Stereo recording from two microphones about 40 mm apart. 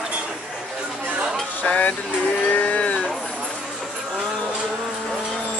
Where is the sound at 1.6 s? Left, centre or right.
Left.